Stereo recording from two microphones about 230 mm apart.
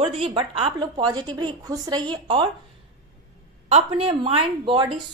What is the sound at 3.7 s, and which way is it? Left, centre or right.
A woman's voice, right.